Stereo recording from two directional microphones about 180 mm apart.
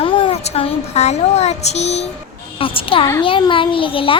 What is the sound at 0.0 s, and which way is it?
A woman's voice, 30° left (ahead or behind).